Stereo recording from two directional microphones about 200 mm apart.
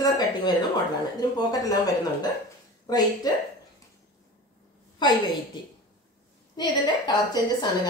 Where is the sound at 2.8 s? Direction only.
20° left (ahead or behind).